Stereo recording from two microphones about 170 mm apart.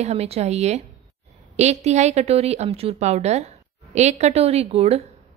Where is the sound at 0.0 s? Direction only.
35° right (ahead or behind).